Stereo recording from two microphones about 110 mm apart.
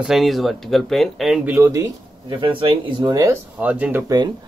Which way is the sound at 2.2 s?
50° right (ahead or behind).